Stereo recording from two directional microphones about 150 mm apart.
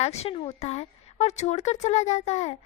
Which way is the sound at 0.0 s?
45° left (ahead or behind).